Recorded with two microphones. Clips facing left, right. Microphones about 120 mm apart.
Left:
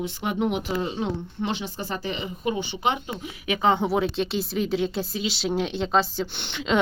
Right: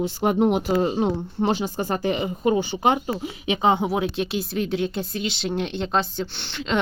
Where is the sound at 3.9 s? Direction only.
5° right (ahead or behind).